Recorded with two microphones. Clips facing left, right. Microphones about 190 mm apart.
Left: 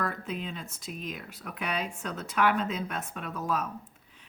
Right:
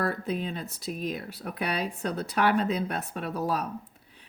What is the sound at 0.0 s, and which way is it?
Speech, 35° right (ahead or behind).